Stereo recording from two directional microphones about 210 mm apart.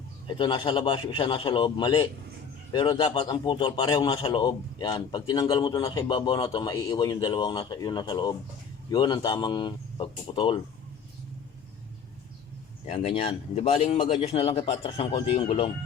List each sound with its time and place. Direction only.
0.3 s a man's voice: 20° left (ahead or behind)
12.8 s a man's voice: 30° left (ahead or behind)